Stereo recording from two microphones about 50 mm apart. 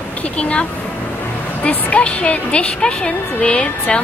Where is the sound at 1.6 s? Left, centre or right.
Left.